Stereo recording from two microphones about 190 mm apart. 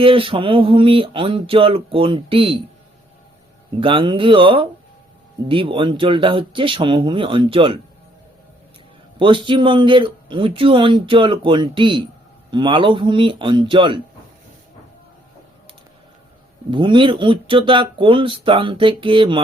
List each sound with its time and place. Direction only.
0.0 s speech: 30° right (ahead or behind)
3.8 s speech: 25° right (ahead or behind)
9.1 s speech: 25° right (ahead or behind)
16.7 s speech: 25° right (ahead or behind)